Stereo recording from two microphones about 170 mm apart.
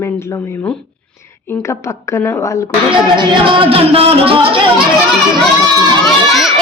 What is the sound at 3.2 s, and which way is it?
Speech, 30° right (ahead or behind).